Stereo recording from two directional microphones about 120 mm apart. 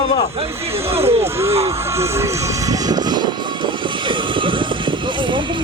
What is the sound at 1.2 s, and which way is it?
Speech, 20° right (ahead or behind).